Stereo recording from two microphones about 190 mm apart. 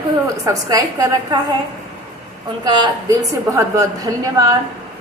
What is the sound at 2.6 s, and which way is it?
A woman's voice, 20° right (ahead or behind).